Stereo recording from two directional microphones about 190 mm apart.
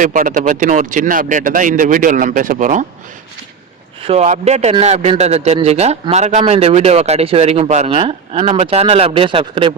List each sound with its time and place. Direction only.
0.0 s speech: 45° right (ahead or behind)
4.0 s speech: 35° right (ahead or behind)